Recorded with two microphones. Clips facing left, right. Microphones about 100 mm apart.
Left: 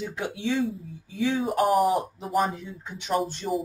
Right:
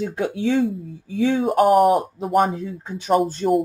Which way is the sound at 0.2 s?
35° right (ahead or behind).